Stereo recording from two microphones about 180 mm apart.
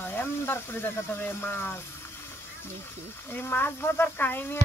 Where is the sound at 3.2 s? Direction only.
10° left (ahead or behind).